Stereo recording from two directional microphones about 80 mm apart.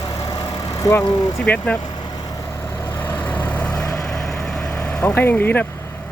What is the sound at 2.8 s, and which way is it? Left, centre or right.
Vehicle, left.